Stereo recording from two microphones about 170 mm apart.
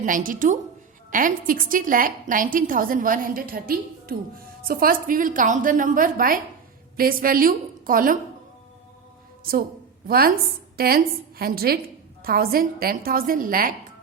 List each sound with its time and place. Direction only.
0.0 s a woman's voice: 50° right (ahead or behind)
9.4 s a woman's voice: 60° right (ahead or behind)